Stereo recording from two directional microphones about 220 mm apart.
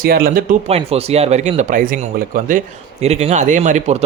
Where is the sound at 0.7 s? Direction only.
25° right (ahead or behind).